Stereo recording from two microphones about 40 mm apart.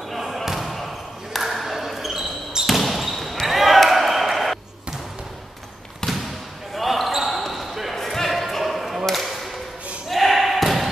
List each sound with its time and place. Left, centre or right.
0.1 s basketball bounce: centre
6.0 s basketball bounce: centre
6.7 s basketball bounce: centre
7.9 s basketball bounce: centre
9.0 s a sound: centre
10.0 s basketball bounce: centre